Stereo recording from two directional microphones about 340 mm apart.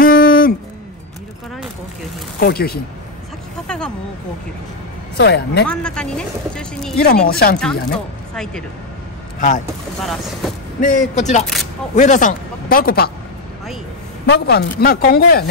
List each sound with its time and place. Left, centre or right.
0.0 s a sound: left
2.4 s speech: left
3.6 s a sound: centre
5.1 s speech: left
5.7 s speech: centre
7.1 s speech: left
7.5 s speech: centre
10.8 s speech: left
14.2 s speech: left